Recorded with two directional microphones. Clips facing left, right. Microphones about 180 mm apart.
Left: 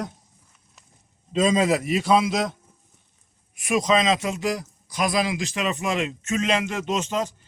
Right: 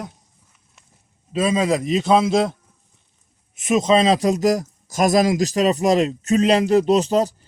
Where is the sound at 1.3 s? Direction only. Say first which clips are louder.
Right 1 dB; 10° right (ahead or behind).